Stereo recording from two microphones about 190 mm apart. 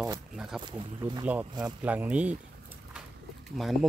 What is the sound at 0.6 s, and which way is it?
Speech, 25° right (ahead or behind).